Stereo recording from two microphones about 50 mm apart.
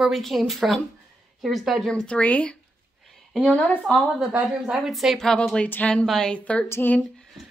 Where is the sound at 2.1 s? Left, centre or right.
Left.